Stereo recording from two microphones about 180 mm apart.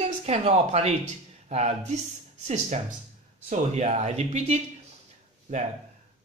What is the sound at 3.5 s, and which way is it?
Speech, 40° right (ahead or behind).